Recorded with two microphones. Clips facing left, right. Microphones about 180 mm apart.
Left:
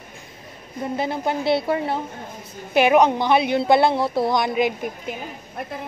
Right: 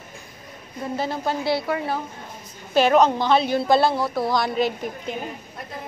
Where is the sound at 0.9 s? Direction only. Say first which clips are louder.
Left 1 dB; 20° left (ahead or behind).